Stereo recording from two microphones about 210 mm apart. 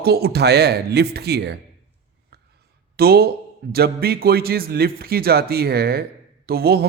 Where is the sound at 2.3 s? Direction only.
50° right (ahead or behind).